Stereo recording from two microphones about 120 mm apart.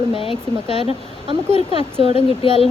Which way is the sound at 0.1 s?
50° left (ahead or behind).